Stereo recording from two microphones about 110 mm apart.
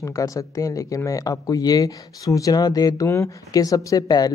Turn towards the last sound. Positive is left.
turn(degrees=35)  # may be behind; listen again after turning